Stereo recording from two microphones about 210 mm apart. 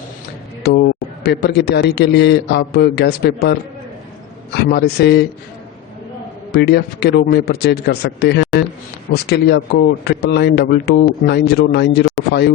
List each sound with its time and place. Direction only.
0.7 s a man's voice: 50° left (ahead or behind)
4.5 s a man's voice: 50° left (ahead or behind)
6.5 s a man's voice: 50° left (ahead or behind)